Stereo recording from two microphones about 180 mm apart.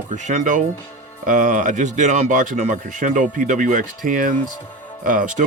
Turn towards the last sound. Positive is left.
turn(degrees=-45)  # may be behind; listen again after turning